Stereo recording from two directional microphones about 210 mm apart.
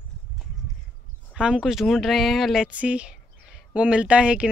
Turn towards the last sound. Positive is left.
turn(degrees=-5)  # may be behind; listen again after turning